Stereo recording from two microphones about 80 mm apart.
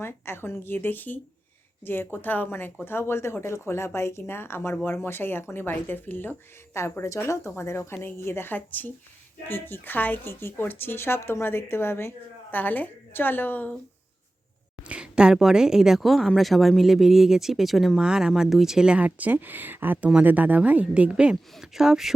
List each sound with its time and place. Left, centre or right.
0.0 s a woman's voice: left
6.7 s a woman's voice: left
14.8 s speech: centre